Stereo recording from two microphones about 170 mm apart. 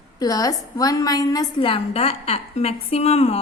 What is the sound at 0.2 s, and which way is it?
A woman's voice, 20° left (ahead or behind).